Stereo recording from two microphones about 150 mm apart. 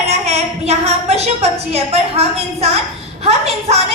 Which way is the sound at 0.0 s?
45° right (ahead or behind).